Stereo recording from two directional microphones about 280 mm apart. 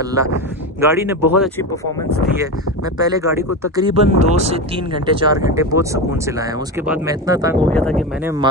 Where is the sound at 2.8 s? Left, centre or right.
Centre.